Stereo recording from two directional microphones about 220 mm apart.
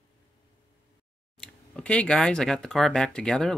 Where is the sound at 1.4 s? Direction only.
5° left (ahead or behind).